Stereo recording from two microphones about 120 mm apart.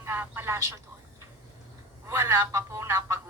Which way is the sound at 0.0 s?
20° right (ahead or behind).